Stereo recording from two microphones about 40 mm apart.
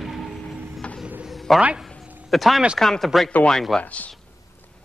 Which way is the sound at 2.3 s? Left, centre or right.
Centre.